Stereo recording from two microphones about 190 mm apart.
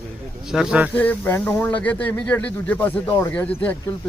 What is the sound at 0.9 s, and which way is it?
Speech, 10° left (ahead or behind).